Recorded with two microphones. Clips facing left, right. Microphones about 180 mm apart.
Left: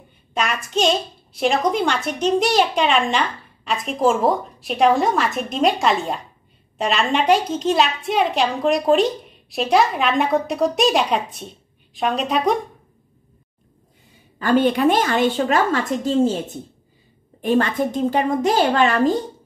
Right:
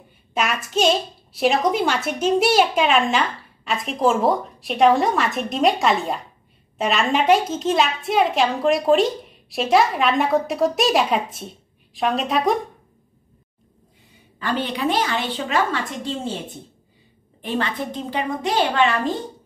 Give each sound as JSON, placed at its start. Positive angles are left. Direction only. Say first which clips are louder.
{"t": 0.3, "sound": "a child's voice", "louder": "even", "side_deg": -5}
{"t": 14.4, "sound": "a woman's voice", "louder": "left 7 dB", "side_deg": 50}